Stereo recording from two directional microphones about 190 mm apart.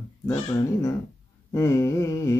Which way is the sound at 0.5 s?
20° left (ahead or behind).